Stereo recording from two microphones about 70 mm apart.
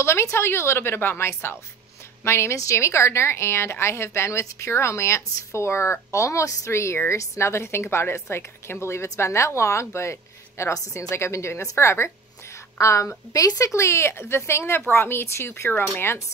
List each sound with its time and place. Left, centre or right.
0.0 s a woman's voice: left
13.7 s a woman's voice: left